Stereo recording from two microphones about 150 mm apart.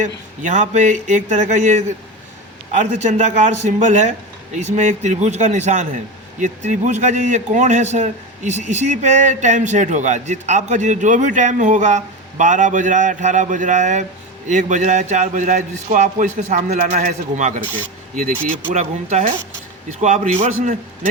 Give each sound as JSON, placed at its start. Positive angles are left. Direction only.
{"t": 0.0, "sound": "a man's voice", "side_deg": -50}